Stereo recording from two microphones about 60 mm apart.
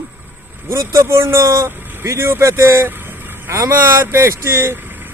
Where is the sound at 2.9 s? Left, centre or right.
Right.